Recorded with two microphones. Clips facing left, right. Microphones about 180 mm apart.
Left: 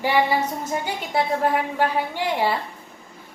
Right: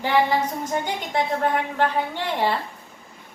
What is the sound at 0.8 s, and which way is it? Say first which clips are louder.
A woman's voice: left 1 dB; 5° left (ahead or behind).